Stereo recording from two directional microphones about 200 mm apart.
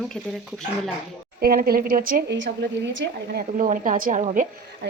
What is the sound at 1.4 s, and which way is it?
A woman's voice, 45° right (ahead or behind).